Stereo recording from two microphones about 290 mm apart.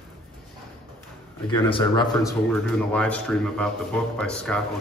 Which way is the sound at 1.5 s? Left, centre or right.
Centre.